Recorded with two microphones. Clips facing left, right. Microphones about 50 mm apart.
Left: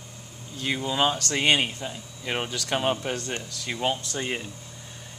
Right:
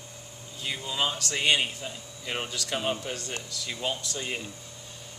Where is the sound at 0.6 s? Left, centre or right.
Left.